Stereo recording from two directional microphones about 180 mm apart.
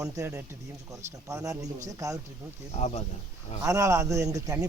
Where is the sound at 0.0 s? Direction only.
15° right (ahead or behind).